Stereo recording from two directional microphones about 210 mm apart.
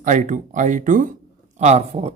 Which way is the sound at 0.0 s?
35° right (ahead or behind).